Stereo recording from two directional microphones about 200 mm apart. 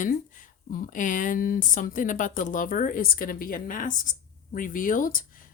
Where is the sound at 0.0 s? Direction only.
40° left (ahead or behind).